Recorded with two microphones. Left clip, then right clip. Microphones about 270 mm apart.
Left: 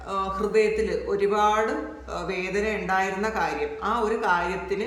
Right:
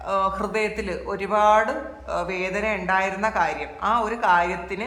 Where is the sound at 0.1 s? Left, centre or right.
Centre.